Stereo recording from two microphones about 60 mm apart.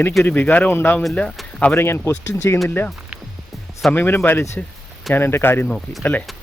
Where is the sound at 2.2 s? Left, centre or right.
Left.